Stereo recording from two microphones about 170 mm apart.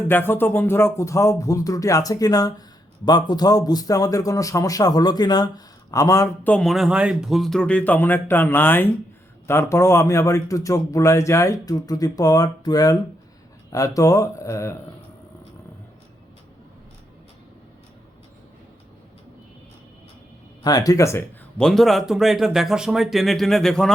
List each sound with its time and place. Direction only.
0.1 s speech: 10° left (ahead or behind)
20.7 s speech: 20° left (ahead or behind)
21.6 s speech: centre (ahead or behind)